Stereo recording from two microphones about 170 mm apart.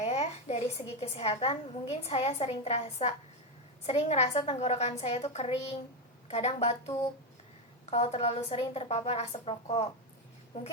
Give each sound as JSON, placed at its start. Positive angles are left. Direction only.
{"t": 0.0, "sound": "a woman's voice", "side_deg": 40}
{"t": 10.5, "sound": "a woman's voice", "side_deg": 45}